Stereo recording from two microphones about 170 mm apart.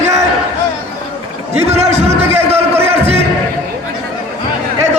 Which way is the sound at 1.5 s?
40° right (ahead or behind).